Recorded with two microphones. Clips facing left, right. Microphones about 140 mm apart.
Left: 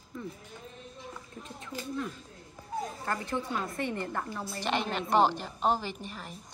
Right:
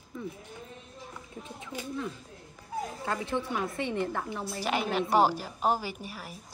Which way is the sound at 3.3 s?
20° right (ahead or behind).